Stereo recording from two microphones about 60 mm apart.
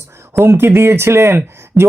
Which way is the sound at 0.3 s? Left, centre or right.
Right.